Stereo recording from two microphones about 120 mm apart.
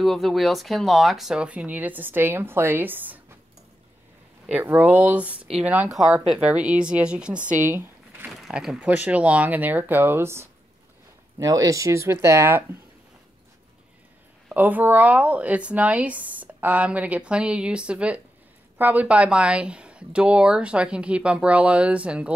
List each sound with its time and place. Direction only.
0.0 s speech: centre (ahead or behind); by 3.2 s 15° right (ahead or behind)
4.6 s speech: 15° right (ahead or behind)
7.7 s a sound: 15° right (ahead or behind)
8.3 s speech: centre (ahead or behind); by 12.6 s 20° right (ahead or behind)
14.5 s speech: 15° right (ahead or behind)